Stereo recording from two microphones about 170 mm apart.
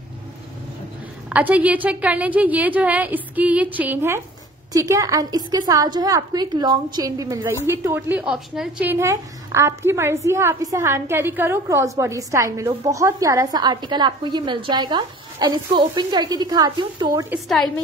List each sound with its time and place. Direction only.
1.3 s a woman's voice: 10° right (ahead or behind); by 17.3 s 25° right (ahead or behind)